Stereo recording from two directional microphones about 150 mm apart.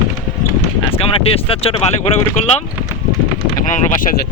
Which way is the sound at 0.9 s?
40° left (ahead or behind).